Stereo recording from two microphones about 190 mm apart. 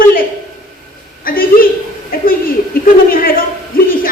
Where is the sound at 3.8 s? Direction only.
50° left (ahead or behind).